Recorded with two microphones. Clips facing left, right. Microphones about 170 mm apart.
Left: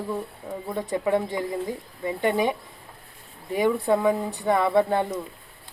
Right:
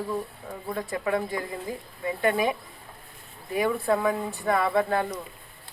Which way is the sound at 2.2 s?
25° left (ahead or behind).